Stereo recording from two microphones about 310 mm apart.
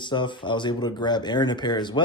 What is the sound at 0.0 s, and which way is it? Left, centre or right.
Speech, centre.